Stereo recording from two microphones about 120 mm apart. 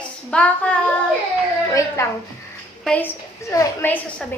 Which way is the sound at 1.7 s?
25° left (ahead or behind).